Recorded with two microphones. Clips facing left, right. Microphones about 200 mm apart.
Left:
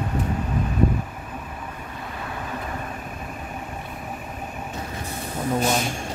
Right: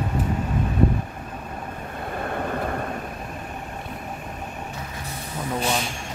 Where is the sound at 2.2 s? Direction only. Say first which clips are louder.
Right 6 dB; 55° right (ahead or behind).